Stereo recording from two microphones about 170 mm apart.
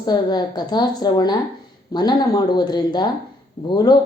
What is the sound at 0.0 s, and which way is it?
A woman's voice, 25° left (ahead or behind).